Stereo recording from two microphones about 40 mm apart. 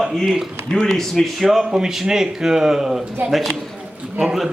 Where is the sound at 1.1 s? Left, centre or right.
Centre.